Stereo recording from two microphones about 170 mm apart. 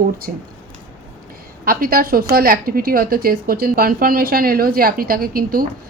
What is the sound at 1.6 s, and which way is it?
A woman's voice, 60° right (ahead or behind).